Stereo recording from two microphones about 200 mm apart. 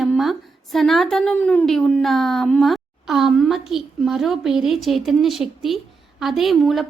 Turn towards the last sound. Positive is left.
turn(degrees=0)  # may be behind; listen again after turning